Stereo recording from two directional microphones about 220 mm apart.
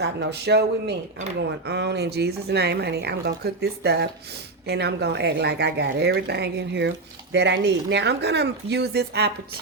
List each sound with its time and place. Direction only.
0.0 s speech: 50° right (ahead or behind)